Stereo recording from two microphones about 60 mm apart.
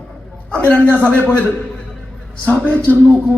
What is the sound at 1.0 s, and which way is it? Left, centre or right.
Speech, left.